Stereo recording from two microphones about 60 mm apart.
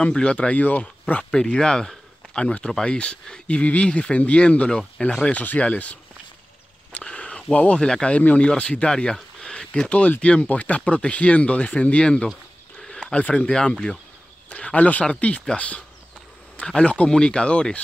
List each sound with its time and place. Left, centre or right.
0.0 s speech: centre
1.3 s speech: centre
5.3 s speech: left
7.0 s a sound: centre
7.5 s speech: centre
12.7 s a sound: centre
13.1 s speech: left